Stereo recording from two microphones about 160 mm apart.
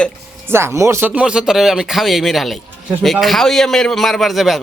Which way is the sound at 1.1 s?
5° right (ahead or behind).